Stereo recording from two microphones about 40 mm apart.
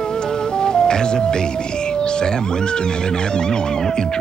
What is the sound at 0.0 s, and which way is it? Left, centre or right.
Speech, centre.